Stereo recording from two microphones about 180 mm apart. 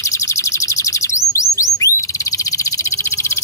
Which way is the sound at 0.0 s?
15° left (ahead or behind).